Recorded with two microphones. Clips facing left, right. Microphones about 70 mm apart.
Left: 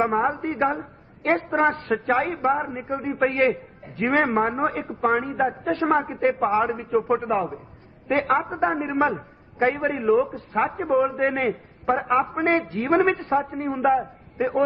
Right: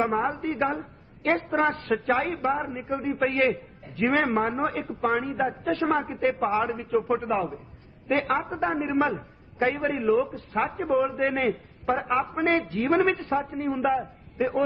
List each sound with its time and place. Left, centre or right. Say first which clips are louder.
0.0 s a woman's voice: left 3 dB; left